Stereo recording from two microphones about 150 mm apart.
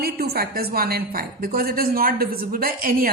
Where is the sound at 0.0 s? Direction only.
90° right.